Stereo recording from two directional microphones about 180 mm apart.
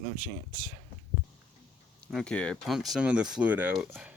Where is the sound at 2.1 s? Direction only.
Centre (ahead or behind).